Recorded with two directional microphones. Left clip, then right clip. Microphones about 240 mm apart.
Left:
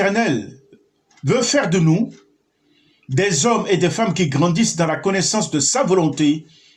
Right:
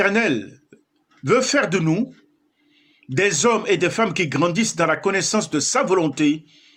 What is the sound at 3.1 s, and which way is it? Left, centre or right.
Speech, right.